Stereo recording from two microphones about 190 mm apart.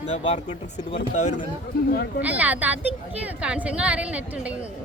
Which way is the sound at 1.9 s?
55° left (ahead or behind).